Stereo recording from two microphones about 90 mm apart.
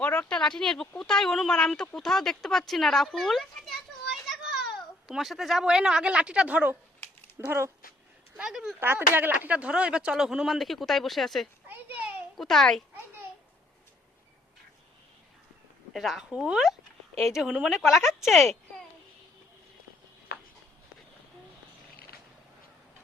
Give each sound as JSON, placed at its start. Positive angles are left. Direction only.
{"t": 0.0, "sound": "speech", "side_deg": 15}
{"t": 7.0, "sound": "a sound", "side_deg": 25}
{"t": 7.3, "sound": "speech", "side_deg": -30}
{"t": 8.4, "sound": "speech", "side_deg": -5}
{"t": 8.8, "sound": "speech", "side_deg": -25}
{"t": 15.9, "sound": "speech", "side_deg": 0}